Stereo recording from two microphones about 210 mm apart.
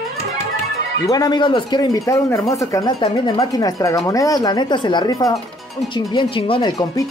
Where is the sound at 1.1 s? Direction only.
20° left (ahead or behind).